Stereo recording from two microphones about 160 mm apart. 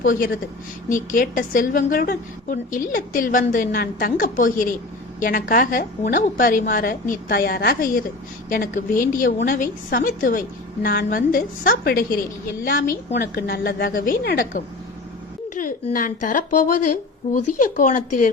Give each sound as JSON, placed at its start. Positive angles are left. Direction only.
{"t": 0.0, "sound": "a woman's voice", "side_deg": 60}
{"t": 13.1, "sound": "a woman's voice", "side_deg": 75}